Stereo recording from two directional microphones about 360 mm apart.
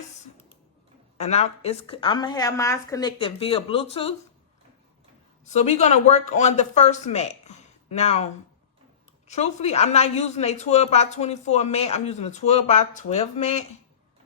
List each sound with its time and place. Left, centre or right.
1.2 s a woman's voice: centre
5.5 s speech: centre
9.2 s a woman's voice: centre